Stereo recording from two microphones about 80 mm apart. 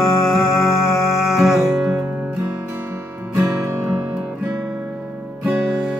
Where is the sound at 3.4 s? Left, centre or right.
Right.